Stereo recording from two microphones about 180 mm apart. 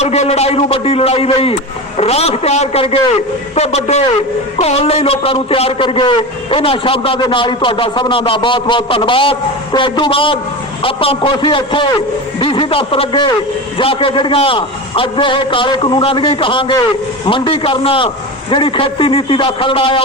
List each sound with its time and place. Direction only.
0.0 s a man's voice: 35° left (ahead or behind)